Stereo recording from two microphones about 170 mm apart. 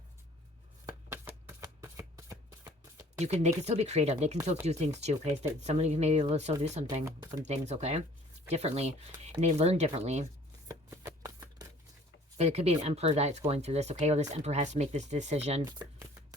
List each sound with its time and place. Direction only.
0.9 s shuffling cards: 15° right (ahead or behind)
3.2 s speech: 40° right (ahead or behind)
10.7 s shuffling cards: 15° right (ahead or behind)
12.4 s speech: 40° right (ahead or behind)
15.6 s speech: 15° right (ahead or behind)